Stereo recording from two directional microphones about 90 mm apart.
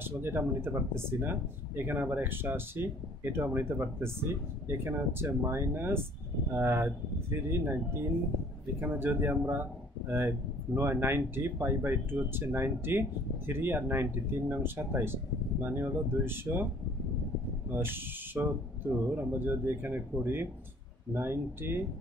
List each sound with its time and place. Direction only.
0.0 s speech: 25° right (ahead or behind)
17.6 s speech: 25° right (ahead or behind)